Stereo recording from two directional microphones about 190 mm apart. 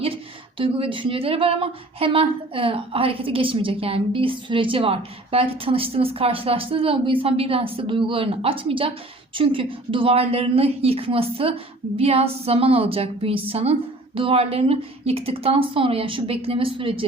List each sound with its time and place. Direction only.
0.6 s a woman's voice: 25° right (ahead or behind)